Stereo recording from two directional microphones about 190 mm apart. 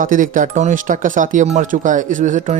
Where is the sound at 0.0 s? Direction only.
45° right (ahead or behind).